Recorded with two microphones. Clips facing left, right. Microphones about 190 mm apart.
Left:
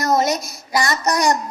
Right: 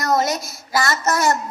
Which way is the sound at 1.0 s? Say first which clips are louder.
Left 1 dB; 15° left (ahead or behind).